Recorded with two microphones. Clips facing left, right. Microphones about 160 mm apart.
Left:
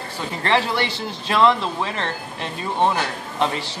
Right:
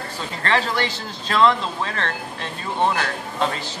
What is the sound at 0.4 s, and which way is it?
Speech, 15° left (ahead or behind).